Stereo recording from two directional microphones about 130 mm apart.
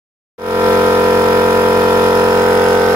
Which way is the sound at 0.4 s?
20° right (ahead or behind).